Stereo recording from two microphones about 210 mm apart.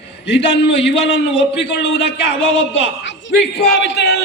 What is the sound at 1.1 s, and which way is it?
A man's voice, 60° left (ahead or behind).